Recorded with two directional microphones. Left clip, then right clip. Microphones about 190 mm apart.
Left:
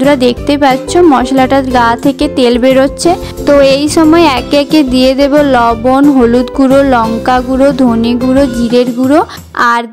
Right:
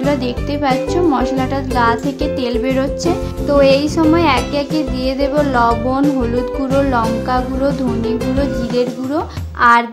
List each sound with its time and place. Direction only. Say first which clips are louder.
0.0 s music: left 10 dB; 45° left (ahead or behind)